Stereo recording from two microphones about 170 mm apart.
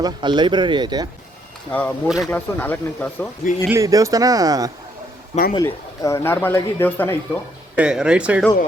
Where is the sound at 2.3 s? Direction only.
10° left (ahead or behind).